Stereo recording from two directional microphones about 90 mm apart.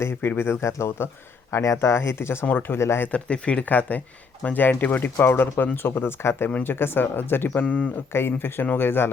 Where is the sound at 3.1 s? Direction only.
10° left (ahead or behind).